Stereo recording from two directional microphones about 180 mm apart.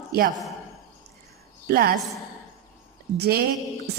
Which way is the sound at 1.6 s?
60° right (ahead or behind).